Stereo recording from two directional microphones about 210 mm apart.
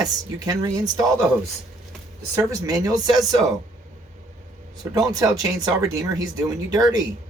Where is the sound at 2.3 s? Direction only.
15° right (ahead or behind).